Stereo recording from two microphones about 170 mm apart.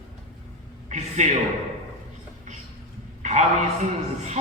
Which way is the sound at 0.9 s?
45° right (ahead or behind).